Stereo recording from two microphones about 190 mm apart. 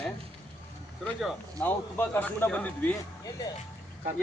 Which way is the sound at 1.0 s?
10° left (ahead or behind).